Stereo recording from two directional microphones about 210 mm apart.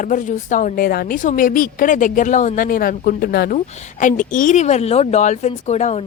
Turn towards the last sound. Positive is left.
turn(degrees=30)  # may be behind; listen again after turning